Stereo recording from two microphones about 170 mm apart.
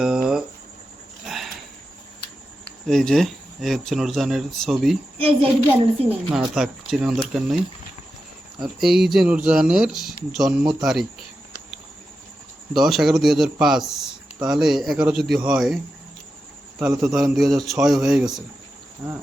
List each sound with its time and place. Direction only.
0.0 s cricket: 5° right (ahead or behind)
2.8 s speech: 5° left (ahead or behind)
5.1 s a woman's voice: 35° right (ahead or behind)
6.1 s speech: 5° right (ahead or behind)
8.8 s speech: centre (ahead or behind)
10.6 s speech: 25° right (ahead or behind)
12.7 s speech: centre (ahead or behind)
16.8 s speech: 5° right (ahead or behind)